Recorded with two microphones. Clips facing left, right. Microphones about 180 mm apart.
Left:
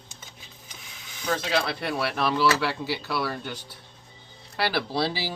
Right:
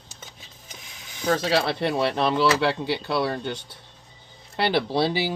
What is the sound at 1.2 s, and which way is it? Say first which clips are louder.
Speech: right 4 dB; 35° right (ahead or behind).